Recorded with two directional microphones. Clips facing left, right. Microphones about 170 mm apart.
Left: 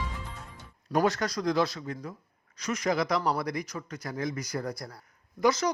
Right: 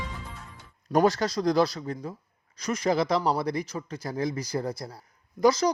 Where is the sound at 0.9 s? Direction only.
40° right (ahead or behind).